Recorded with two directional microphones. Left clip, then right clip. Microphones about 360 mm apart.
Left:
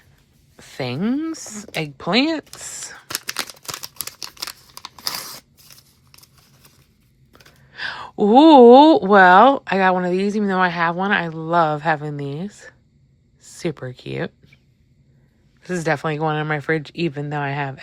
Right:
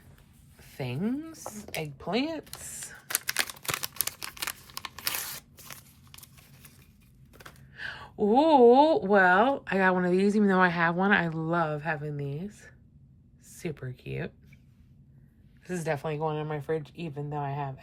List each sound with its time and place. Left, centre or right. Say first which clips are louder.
0.8 s a woman's voice: left 10 dB; centre
3.6 s crumpling: left 1 dB; centre
7.7 s a woman's voice: left 11 dB; centre
15.8 s a woman's voice: left 10 dB; centre
16.1 s speech: left 10 dB; left